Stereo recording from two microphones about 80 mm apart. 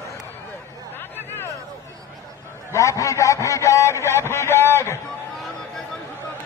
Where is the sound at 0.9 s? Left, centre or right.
Left.